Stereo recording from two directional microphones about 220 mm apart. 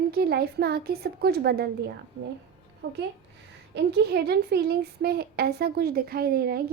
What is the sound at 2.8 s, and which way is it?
A child's voice, 50° right (ahead or behind).